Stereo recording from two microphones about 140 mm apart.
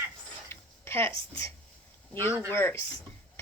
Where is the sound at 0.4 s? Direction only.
15° left (ahead or behind).